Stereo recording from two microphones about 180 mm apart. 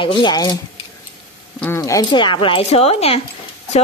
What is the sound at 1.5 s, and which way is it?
Speech, 10° left (ahead or behind).